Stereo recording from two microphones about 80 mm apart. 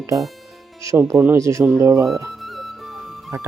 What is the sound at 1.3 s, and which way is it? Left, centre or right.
Speech, right.